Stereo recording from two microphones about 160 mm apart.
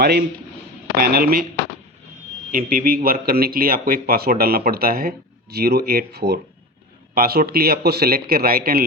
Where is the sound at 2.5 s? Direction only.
60° right (ahead or behind); by 6.4 s 90° right.